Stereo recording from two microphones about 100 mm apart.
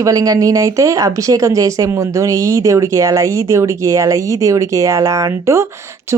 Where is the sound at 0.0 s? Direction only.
35° right (ahead or behind).